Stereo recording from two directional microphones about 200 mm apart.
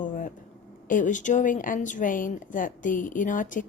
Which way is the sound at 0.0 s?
40° left (ahead or behind).